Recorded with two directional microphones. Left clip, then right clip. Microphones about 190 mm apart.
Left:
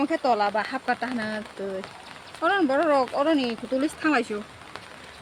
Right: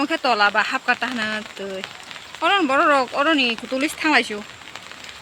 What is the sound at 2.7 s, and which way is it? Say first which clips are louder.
Speech: right 5 dB; 15° right (ahead or behind).